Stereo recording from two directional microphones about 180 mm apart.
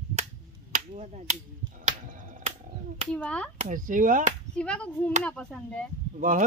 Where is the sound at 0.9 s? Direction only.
40° right (ahead or behind).